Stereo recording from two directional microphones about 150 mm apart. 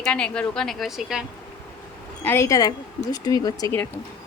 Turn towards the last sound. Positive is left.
turn(degrees=25)  # may be behind; listen again after turning